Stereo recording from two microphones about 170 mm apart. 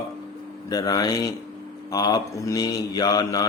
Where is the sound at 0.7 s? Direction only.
20° left (ahead or behind).